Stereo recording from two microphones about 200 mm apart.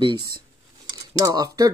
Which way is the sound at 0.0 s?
25° right (ahead or behind).